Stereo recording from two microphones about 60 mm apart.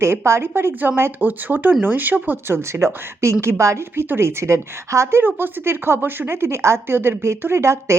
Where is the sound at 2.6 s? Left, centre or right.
Right.